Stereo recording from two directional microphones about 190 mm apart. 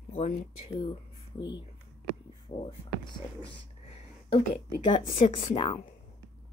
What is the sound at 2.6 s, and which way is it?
Speech, 25° left (ahead or behind).